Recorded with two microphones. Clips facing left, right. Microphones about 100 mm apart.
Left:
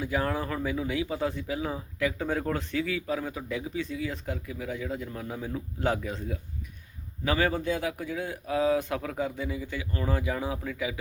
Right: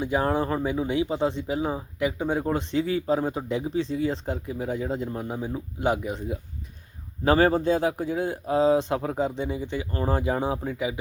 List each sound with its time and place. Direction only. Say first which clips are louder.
0.0 s speech: right 5 dB; 25° right (ahead or behind)
7.3 s speech: right 7 dB; 35° right (ahead or behind)